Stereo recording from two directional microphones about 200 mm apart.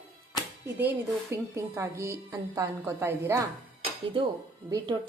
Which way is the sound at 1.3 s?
15° right (ahead or behind).